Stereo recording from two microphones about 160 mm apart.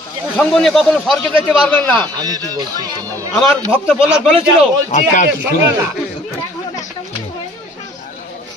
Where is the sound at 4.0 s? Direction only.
5° right (ahead or behind).